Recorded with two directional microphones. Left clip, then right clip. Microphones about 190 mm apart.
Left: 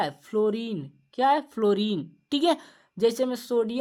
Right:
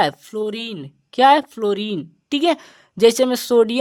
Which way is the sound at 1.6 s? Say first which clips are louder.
Right 3 dB; 20° right (ahead or behind).